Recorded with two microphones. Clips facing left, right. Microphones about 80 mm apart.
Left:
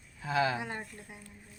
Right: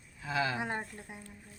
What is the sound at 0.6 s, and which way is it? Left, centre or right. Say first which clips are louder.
Speech: right 3 dB; right.